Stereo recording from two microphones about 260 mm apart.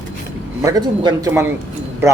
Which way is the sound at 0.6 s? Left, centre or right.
Centre.